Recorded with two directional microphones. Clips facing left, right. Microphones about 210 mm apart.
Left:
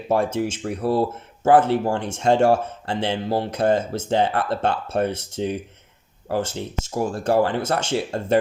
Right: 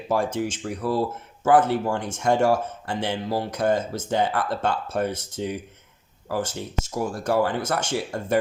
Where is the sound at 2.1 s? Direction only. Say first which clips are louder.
Left 3 dB; 25° left (ahead or behind).